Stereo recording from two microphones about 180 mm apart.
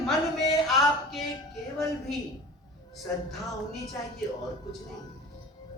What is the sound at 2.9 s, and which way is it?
Speech, centre (ahead or behind).